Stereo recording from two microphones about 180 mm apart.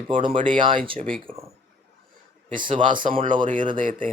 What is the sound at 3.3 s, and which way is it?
Speech, 45° right (ahead or behind).